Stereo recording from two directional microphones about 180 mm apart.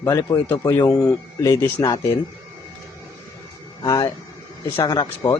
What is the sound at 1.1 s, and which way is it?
Speech, 20° left (ahead or behind).